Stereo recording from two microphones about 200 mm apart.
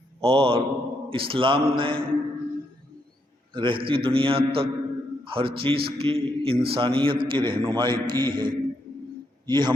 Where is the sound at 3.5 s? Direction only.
25° right (ahead or behind).